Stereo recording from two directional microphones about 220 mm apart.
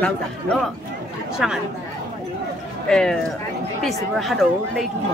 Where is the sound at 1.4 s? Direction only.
Centre (ahead or behind).